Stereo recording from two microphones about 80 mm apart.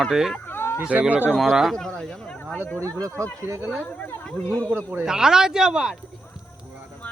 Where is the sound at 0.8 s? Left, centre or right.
Centre.